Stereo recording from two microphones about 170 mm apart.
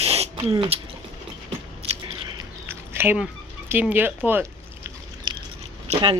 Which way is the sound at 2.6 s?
15° right (ahead or behind).